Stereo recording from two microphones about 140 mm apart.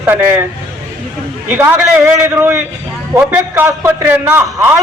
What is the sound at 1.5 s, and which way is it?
Speech, 15° right (ahead or behind).